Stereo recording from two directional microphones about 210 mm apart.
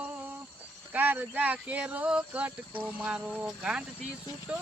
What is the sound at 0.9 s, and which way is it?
Speech, 10° right (ahead or behind).